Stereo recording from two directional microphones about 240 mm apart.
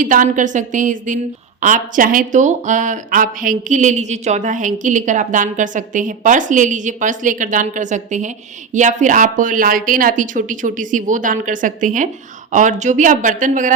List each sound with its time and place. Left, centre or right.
0.0 s speech: right